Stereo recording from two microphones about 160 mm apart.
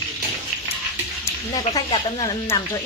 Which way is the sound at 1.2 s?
25° left (ahead or behind).